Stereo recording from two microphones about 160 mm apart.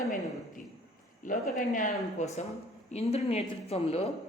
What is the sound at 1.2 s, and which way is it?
A woman's voice, 55° left (ahead or behind).